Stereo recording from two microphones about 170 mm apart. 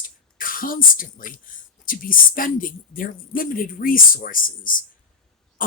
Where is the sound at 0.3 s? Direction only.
55° left (ahead or behind).